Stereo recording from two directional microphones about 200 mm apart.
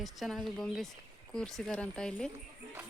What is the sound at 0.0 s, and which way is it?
Speech, centre (ahead or behind).